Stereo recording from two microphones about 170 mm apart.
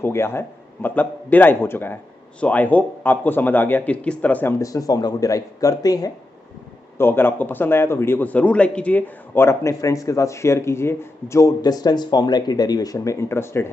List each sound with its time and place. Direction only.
0.0 s a man's voice: 15° left (ahead or behind)